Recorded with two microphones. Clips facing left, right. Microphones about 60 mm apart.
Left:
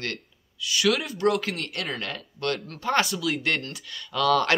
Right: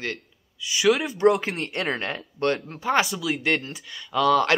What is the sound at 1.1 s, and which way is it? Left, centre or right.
Speech, right.